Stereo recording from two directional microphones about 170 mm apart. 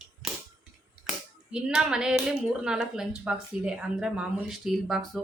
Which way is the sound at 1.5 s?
5° right (ahead or behind).